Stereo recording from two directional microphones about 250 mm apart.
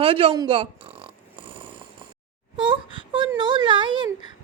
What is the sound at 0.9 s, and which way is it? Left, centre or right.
Snoring, right.